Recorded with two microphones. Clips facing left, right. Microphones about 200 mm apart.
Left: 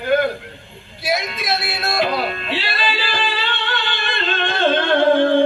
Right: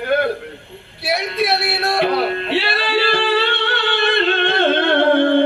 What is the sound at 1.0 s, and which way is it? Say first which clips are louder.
Music: right 3 dB; 65° right (ahead or behind).